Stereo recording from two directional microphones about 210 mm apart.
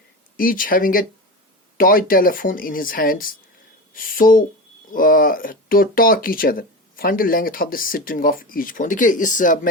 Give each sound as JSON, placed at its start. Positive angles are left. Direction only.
{"t": 0.3, "sound": "speech", "side_deg": 40}